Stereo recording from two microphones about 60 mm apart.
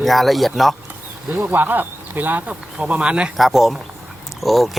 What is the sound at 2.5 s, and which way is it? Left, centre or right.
Speech, centre.